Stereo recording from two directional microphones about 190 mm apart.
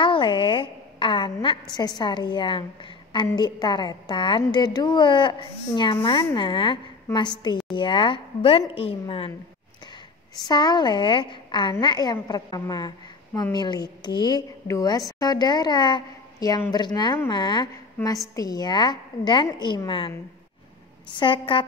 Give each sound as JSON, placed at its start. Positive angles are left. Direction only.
{"t": 0.0, "sound": "a woman's voice", "side_deg": 25}
{"t": 10.5, "sound": "a woman's voice", "side_deg": 20}